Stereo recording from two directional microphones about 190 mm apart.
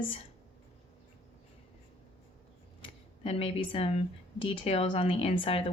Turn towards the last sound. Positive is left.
turn(degrees=30)  # may be behind; listen again after turning